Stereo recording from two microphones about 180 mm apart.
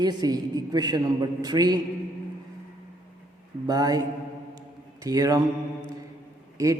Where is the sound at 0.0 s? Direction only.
25° right (ahead or behind).